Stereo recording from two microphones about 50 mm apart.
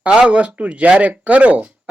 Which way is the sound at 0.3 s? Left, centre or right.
Right.